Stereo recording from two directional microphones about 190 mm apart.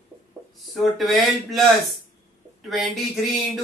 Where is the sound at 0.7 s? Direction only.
Centre (ahead or behind).